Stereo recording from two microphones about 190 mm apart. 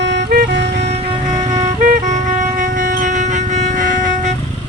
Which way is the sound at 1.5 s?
40° right (ahead or behind).